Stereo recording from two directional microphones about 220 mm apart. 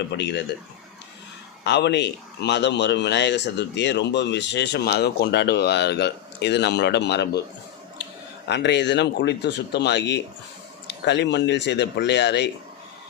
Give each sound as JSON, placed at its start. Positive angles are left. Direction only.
{"t": 0.2, "sound": "speech", "side_deg": 50}
{"t": 1.6, "sound": "speech", "side_deg": 50}
{"t": 8.4, "sound": "speech", "side_deg": 50}